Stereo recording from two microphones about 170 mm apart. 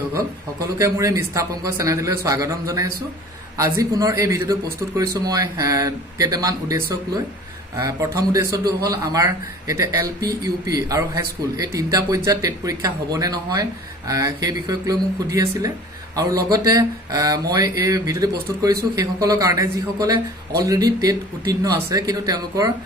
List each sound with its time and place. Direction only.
0.8 s speech: 20° right (ahead or behind)